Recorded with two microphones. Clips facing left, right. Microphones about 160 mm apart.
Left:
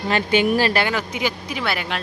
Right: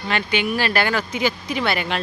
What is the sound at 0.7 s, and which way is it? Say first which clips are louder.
Speech: even; 20° left (ahead or behind).